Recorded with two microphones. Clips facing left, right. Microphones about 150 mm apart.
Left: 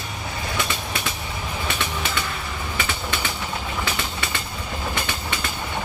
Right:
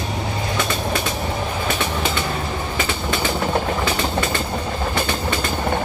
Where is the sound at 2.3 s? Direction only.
40° right (ahead or behind).